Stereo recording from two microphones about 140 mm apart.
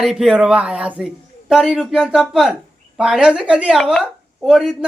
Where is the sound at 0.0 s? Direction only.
Centre (ahead or behind).